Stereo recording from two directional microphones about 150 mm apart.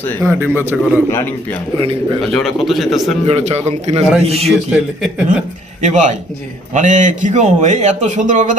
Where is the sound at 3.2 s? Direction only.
45° right (ahead or behind).